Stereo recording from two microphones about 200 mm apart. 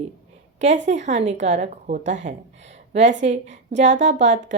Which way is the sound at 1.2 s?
65° right (ahead or behind).